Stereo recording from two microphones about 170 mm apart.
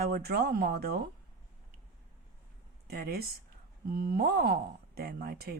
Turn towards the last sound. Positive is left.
turn(degrees=-65)  # may be behind; listen again after turning